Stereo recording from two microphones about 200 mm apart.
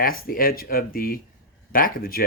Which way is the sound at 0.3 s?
45° left (ahead or behind).